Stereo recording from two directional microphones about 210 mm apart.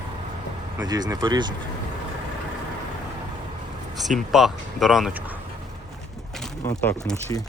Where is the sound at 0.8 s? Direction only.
20° right (ahead or behind).